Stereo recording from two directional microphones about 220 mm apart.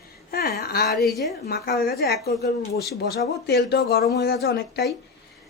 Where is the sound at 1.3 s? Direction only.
45° left (ahead or behind).